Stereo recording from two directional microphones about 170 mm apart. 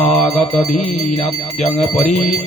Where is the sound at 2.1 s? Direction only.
Centre (ahead or behind).